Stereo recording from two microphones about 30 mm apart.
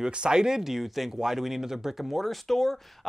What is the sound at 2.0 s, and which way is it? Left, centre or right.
Speech, centre.